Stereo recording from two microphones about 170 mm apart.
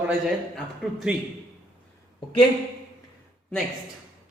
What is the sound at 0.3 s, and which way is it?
Speech, centre (ahead or behind).